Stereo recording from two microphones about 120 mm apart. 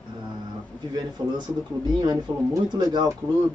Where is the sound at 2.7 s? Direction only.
40° right (ahead or behind).